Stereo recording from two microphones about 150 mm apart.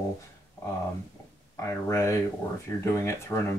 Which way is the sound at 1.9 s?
20° left (ahead or behind).